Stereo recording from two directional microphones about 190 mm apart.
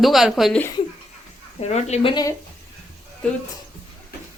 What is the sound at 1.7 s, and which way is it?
Speech, 35° left (ahead or behind).